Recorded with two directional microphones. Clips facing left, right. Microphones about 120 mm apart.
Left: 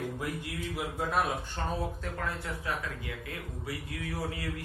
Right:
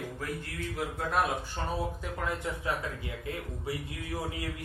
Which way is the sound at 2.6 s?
25° right (ahead or behind).